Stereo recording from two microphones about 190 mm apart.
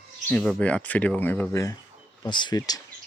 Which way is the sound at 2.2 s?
25° left (ahead or behind).